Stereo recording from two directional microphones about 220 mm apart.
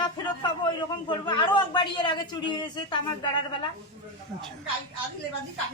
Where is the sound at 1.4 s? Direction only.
20° left (ahead or behind).